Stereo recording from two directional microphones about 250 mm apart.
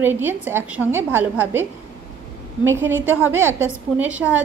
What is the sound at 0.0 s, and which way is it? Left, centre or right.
A woman's voice, centre.